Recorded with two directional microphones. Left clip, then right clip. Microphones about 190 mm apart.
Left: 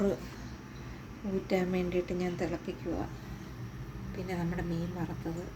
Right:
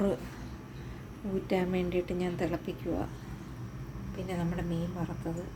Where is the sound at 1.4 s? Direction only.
5° right (ahead or behind).